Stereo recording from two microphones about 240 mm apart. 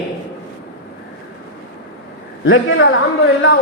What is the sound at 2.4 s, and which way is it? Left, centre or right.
Speech, left.